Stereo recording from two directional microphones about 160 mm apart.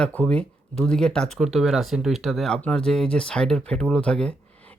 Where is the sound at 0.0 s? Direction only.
10° left (ahead or behind).